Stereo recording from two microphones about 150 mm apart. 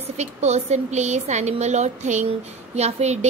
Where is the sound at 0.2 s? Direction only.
50° right (ahead or behind).